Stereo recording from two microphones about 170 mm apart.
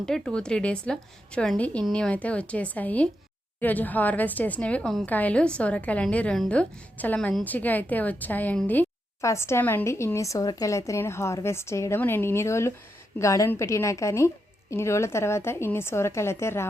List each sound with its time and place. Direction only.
0.0 s a woman's voice: 5° left (ahead or behind)